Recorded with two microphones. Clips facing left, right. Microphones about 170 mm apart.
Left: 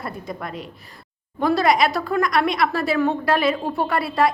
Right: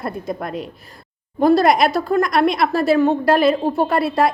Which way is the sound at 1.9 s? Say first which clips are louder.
Right 5 dB; 25° right (ahead or behind).